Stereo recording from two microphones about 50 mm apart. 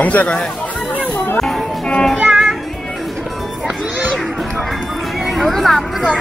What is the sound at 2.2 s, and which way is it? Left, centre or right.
Music, centre.